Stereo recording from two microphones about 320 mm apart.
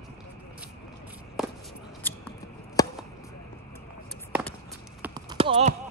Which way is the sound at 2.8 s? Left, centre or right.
Centre.